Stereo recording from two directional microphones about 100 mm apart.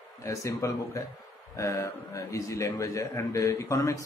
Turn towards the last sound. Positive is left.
turn(degrees=30)  # may be behind; listen again after turning